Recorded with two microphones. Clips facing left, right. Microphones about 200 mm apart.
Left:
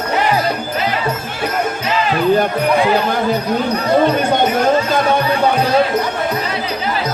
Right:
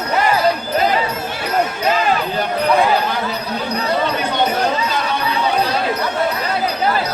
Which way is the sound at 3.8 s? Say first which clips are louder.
Left 5 dB; 50° left (ahead or behind).